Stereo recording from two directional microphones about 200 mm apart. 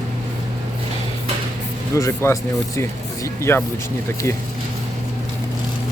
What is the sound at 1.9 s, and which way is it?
Speech, 15° left (ahead or behind).